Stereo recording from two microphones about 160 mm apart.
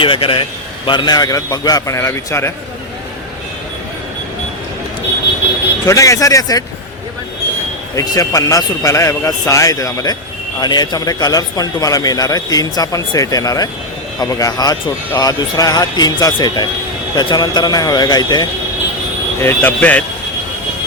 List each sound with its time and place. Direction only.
0.0 s a man's voice: 35° left (ahead or behind); by 2.5 s 15° left (ahead or behind)
5.8 s a man's voice: 20° left (ahead or behind)
7.9 s a man's voice: 20° left (ahead or behind)
19.4 s speech: 15° left (ahead or behind)